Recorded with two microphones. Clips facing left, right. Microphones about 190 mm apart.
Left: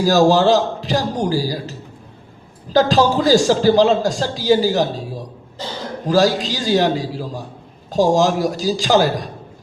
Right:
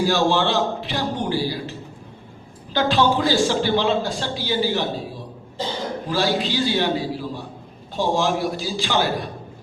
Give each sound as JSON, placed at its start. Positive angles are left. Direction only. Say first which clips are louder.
{"t": 0.0, "sound": "a man's voice", "louder": "left 6 dB", "side_deg": 40}
{"t": 2.7, "sound": "a man's voice", "louder": "left 5 dB", "side_deg": 40}